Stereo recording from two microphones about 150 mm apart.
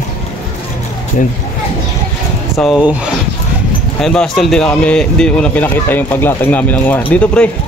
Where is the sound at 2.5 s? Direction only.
Centre (ahead or behind).